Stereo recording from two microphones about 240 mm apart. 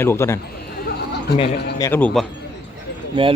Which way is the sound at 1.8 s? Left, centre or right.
Centre.